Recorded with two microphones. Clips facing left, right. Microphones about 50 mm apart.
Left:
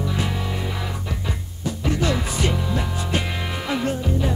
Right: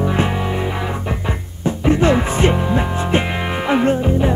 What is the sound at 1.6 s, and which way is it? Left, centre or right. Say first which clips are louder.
Music: right 8 dB; right.